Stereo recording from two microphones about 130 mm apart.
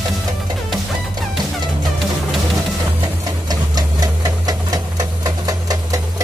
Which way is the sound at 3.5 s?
30° right (ahead or behind).